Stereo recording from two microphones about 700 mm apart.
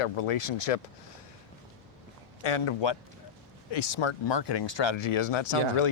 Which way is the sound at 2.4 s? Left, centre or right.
Left.